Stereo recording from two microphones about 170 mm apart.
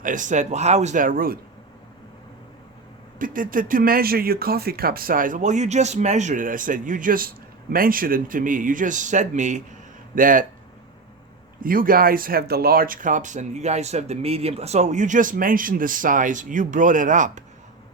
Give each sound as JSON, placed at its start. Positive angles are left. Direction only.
{"t": 0.0, "sound": "speech", "side_deg": -50}
{"t": 3.2, "sound": "speech", "side_deg": -50}
{"t": 11.6, "sound": "speech", "side_deg": -55}